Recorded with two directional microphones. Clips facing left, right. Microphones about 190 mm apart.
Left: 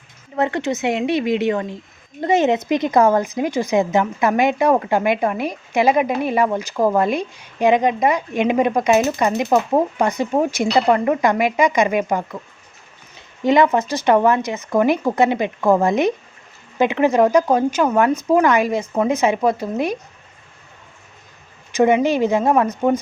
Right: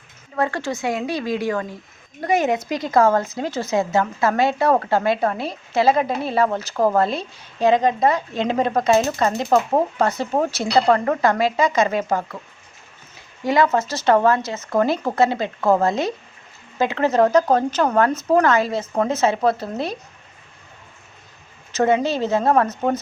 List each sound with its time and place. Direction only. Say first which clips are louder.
0.3 s a woman's voice: left 3 dB; 20° left (ahead or behind)
13.4 s speech: left 3 dB; 20° left (ahead or behind)
21.7 s speech: left 3 dB; 15° left (ahead or behind)